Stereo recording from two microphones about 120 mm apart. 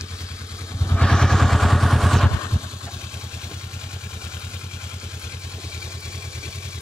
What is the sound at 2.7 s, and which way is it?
Vehicle, 5° right (ahead or behind).